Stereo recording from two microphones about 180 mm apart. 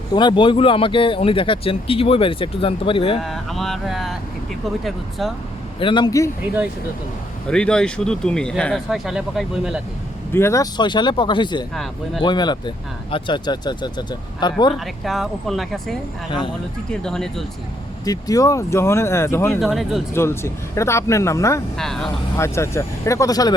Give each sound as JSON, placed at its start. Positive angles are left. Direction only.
{"t": 0.1, "sound": "speech", "side_deg": 25}
{"t": 3.2, "sound": "speech", "side_deg": 0}
{"t": 5.8, "sound": "speech", "side_deg": 25}
{"t": 7.5, "sound": "speech", "side_deg": 5}
{"t": 10.3, "sound": "speech", "side_deg": 15}
{"t": 11.7, "sound": "speech", "side_deg": 0}
{"t": 12.2, "sound": "speech", "side_deg": 25}
{"t": 15.0, "sound": "speech", "side_deg": 0}
{"t": 18.0, "sound": "speech", "side_deg": 20}
{"t": 19.5, "sound": "speech", "side_deg": 0}
{"t": 20.1, "sound": "speech", "side_deg": 15}
{"t": 21.8, "sound": "speech", "side_deg": 5}
{"t": 22.4, "sound": "speech", "side_deg": 15}